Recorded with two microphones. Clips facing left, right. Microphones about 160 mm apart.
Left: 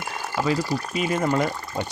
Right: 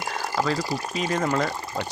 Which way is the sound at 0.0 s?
40° right (ahead or behind).